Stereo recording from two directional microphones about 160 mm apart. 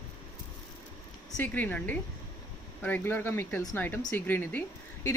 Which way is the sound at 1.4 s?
10° left (ahead or behind).